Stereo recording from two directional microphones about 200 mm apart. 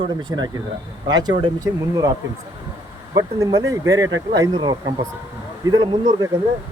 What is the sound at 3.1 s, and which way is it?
A man's voice, 15° right (ahead or behind).